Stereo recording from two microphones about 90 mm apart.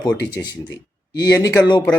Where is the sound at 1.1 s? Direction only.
40° left (ahead or behind).